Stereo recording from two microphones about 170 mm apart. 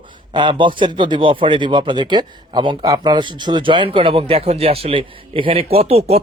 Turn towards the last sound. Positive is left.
turn(degrees=-35)  # may be behind; listen again after turning